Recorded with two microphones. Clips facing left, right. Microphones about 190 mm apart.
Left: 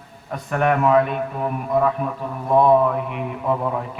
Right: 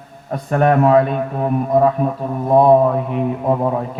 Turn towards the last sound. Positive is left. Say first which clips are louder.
# right 5 dB
turn(degrees=-35)  # may be behind; listen again after turning